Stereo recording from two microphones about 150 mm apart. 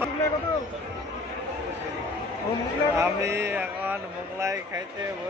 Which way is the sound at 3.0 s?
15° right (ahead or behind).